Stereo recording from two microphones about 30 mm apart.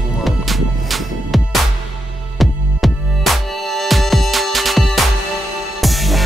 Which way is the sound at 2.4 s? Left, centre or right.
Centre.